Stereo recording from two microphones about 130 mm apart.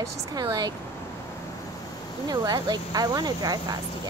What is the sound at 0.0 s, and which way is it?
Speech, 25° right (ahead or behind).